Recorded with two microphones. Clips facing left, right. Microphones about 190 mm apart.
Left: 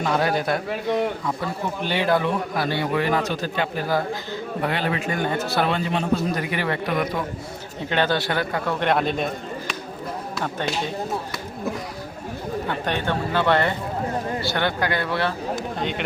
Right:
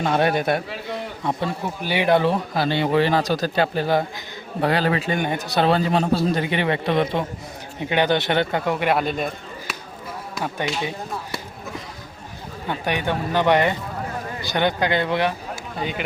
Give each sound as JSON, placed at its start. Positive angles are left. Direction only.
{"t": 0.0, "sound": "a man's voice", "side_deg": -25}
{"t": 1.8, "sound": "speech", "side_deg": -10}
{"t": 2.1, "sound": "a man's voice", "side_deg": -30}
{"t": 5.1, "sound": "speech", "side_deg": -15}
{"t": 5.6, "sound": "a man's voice", "side_deg": -35}
{"t": 7.8, "sound": "a man's voice", "side_deg": -15}
{"t": 8.8, "sound": "a man's voice", "side_deg": -5}
{"t": 10.3, "sound": "speech", "side_deg": -10}
{"t": 12.6, "sound": "speech", "side_deg": -15}
{"t": 15.8, "sound": "speech", "side_deg": -5}